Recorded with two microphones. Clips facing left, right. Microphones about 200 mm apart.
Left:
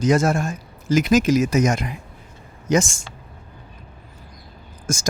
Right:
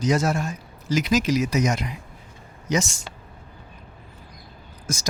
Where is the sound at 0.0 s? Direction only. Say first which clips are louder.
Left 4 dB; 50° left (ahead or behind).